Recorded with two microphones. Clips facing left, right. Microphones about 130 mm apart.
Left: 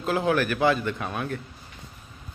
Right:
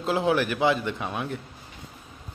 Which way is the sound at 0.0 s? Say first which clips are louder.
Even; 20° right (ahead or behind).